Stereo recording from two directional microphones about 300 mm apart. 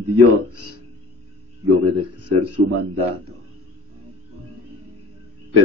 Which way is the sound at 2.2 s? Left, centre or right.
Right.